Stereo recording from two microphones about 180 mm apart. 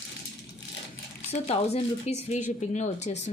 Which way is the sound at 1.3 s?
35° left (ahead or behind).